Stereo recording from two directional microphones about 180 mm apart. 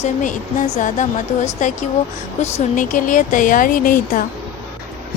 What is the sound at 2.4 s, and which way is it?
A woman's voice, 45° left (ahead or behind).